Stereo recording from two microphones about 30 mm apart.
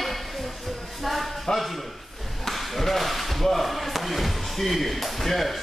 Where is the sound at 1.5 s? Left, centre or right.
Left.